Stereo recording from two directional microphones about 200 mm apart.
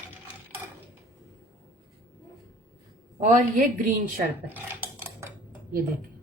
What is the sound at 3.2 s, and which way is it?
Speech, 40° right (ahead or behind).